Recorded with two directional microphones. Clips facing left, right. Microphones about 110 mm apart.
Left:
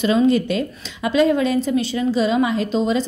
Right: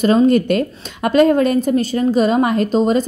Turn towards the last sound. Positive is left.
turn(degrees=-45)  # may be behind; listen again after turning